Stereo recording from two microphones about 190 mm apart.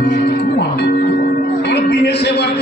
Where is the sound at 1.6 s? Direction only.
60° left (ahead or behind).